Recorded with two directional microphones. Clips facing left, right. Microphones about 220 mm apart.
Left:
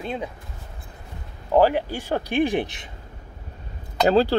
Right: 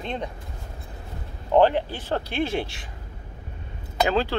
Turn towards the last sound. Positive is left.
turn(degrees=35)  # may be behind; listen again after turning